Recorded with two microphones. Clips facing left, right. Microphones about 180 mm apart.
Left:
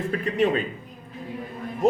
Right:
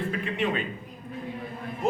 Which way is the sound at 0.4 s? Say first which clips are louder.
Left 7 dB; 40° left (ahead or behind).